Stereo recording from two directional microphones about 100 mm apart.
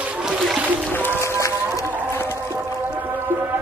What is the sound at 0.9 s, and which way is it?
Music, 20° left (ahead or behind).